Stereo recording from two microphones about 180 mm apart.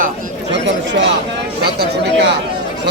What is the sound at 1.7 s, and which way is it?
Speech, 70° right (ahead or behind).